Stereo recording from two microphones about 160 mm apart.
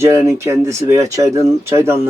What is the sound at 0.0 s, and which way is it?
Speech, 15° right (ahead or behind).